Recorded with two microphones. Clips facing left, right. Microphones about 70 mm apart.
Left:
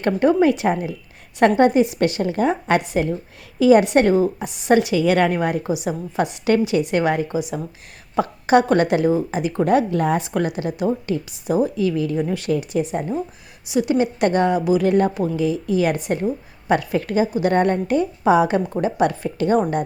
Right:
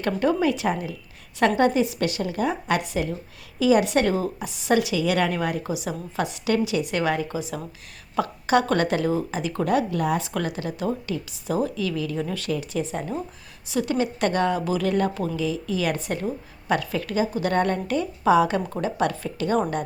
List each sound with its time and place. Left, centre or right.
0.0 s a woman's voice: left
5.6 s speech: left
6.4 s a woman's voice: left